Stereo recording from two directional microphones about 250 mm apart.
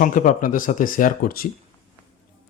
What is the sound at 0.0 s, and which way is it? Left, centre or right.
Speech, left.